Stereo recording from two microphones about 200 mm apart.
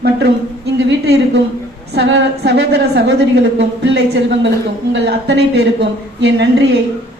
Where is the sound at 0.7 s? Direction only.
60° right (ahead or behind).